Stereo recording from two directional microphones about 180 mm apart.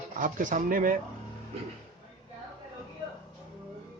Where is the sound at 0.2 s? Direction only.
45° right (ahead or behind).